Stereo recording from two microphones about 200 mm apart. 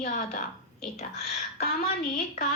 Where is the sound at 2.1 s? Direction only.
35° left (ahead or behind).